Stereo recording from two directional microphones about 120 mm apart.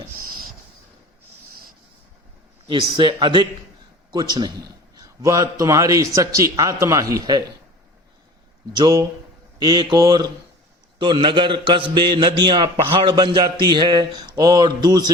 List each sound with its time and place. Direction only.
2.6 s a man's voice: 40° right (ahead or behind)
8.7 s a man's voice: 35° right (ahead or behind)